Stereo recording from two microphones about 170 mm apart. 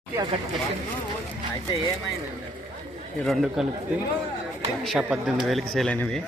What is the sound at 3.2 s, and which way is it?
Speech, centre (ahead or behind).